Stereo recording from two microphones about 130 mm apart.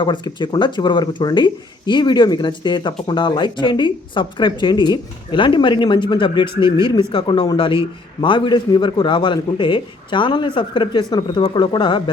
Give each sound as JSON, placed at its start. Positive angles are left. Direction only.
{"t": 0.0, "sound": "speech", "side_deg": 40}